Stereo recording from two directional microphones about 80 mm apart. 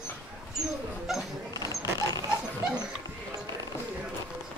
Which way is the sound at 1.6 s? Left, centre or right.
Right.